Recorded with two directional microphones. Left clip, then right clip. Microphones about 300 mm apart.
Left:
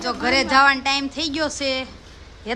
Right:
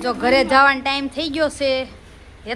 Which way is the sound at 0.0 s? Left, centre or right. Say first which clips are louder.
Right 4 dB; centre.